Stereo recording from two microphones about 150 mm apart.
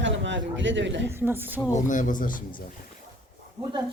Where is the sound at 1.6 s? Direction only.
20° left (ahead or behind).